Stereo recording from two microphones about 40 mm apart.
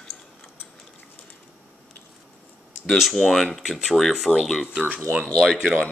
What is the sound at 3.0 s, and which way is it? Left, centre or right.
Speech, centre.